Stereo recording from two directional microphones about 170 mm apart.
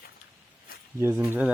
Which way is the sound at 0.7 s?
60° left (ahead or behind).